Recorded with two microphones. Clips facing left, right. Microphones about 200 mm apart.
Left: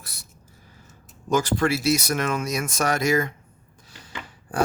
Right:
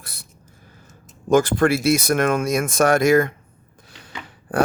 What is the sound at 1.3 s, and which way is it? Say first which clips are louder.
Speech: right 6 dB; 55° right (ahead or behind).